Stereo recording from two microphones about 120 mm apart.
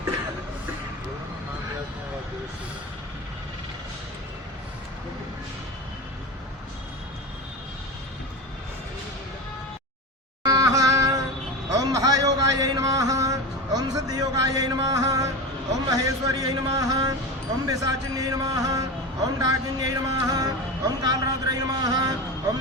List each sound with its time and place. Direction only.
10.4 s music: 30° right (ahead or behind)
11.7 s a sound: 30° right (ahead or behind)
15.9 s speech: 30° right (ahead or behind)